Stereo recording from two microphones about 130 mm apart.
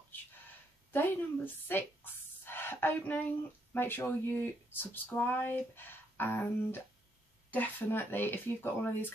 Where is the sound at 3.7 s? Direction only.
15° left (ahead or behind).